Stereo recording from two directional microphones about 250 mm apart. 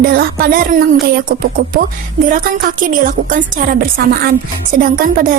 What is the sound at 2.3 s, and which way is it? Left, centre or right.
A woman's voice, right.